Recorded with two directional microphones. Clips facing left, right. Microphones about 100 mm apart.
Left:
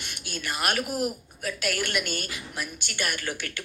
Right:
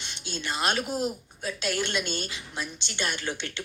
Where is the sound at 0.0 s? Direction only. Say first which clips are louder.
Even; 25° right (ahead or behind).